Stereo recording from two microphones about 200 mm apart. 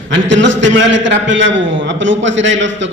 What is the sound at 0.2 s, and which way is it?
A man's voice, 70° right (ahead or behind).